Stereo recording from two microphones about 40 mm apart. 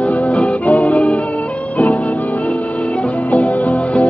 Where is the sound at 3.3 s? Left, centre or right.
Left.